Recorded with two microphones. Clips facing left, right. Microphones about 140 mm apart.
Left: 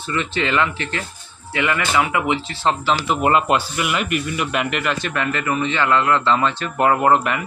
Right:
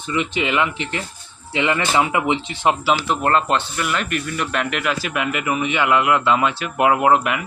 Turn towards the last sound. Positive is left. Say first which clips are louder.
# even
turn(degrees=-5)  # may be behind; listen again after turning